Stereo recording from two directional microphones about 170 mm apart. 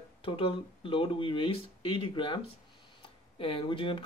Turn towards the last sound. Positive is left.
turn(degrees=30)  # may be behind; listen again after turning